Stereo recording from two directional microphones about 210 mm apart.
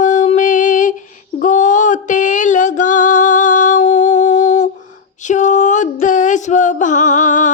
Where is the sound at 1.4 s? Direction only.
35° left (ahead or behind).